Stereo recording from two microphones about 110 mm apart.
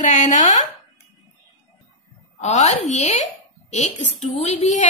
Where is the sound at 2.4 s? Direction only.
90° left.